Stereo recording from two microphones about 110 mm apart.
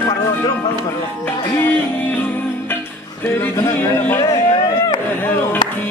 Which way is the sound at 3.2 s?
20° left (ahead or behind).